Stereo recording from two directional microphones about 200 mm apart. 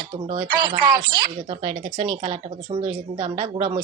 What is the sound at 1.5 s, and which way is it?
Speech, 30° right (ahead or behind).